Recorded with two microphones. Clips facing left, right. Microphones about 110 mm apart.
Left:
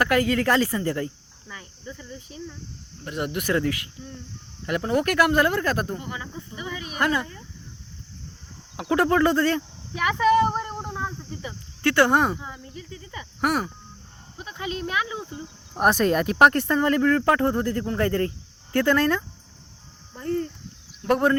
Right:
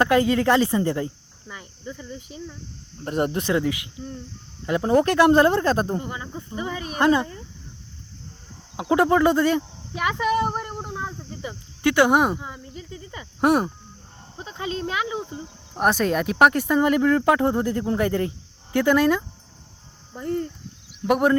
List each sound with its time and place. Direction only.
0.0 s speech: 20° right (ahead or behind)
3.0 s speech: 40° right (ahead or behind)
3.4 s speech: 15° right (ahead or behind); by 7.0 s 35° right (ahead or behind)
7.0 s speech: 25° right (ahead or behind)
8.7 s speech: 20° right (ahead or behind)
15.7 s speech: centre (ahead or behind)